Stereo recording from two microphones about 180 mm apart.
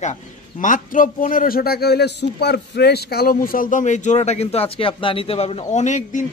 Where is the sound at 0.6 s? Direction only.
45° left (ahead or behind).